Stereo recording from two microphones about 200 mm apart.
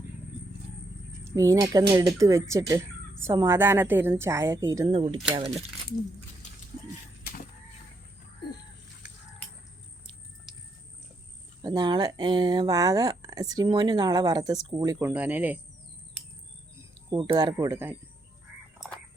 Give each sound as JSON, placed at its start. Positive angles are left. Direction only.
{"t": 1.2, "sound": "a woman's voice", "side_deg": -15}
{"t": 10.5, "sound": "a sound", "side_deg": 0}
{"t": 11.6, "sound": "a woman's voice", "side_deg": -20}
{"t": 17.1, "sound": "speech", "side_deg": -20}